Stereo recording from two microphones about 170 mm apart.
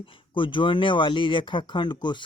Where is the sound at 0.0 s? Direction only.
30° left (ahead or behind).